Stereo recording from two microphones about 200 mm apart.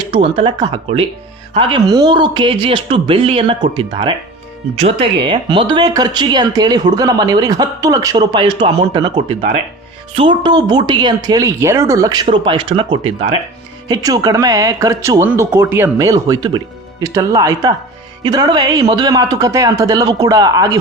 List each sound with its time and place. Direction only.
0.1 s speech: 25° right (ahead or behind)
13.8 s speech: 20° right (ahead or behind)